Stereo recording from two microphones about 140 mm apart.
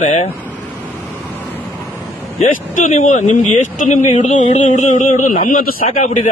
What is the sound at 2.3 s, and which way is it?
Speech, 65° left (ahead or behind).